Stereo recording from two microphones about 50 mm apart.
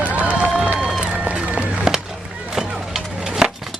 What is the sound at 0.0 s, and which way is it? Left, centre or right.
Run, right.